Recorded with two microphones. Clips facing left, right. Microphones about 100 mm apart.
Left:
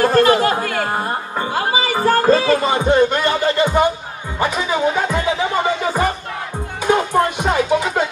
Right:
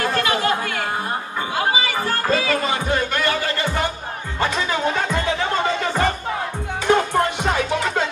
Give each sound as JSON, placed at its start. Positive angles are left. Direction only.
{"t": 0.0, "sound": "chatter", "side_deg": 40}
{"t": 1.5, "sound": "music", "side_deg": 40}
{"t": 4.4, "sound": "speech", "side_deg": 10}
{"t": 7.0, "sound": "music", "side_deg": 15}